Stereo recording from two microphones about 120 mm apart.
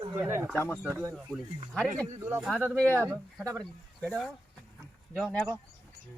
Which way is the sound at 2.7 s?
10° left (ahead or behind).